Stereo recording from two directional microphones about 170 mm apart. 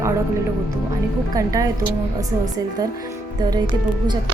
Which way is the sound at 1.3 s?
20° right (ahead or behind).